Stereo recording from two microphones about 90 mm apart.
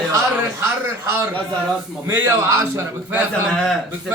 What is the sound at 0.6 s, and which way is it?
A man's voice, 30° right (ahead or behind).